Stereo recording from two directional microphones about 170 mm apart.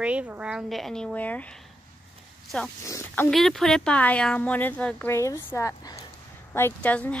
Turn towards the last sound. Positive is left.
turn(degrees=10)  # may be behind; listen again after turning